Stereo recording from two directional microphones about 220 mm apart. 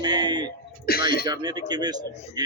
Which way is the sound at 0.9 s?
45° left (ahead or behind).